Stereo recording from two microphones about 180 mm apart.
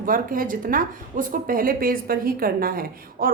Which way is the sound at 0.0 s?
50° right (ahead or behind).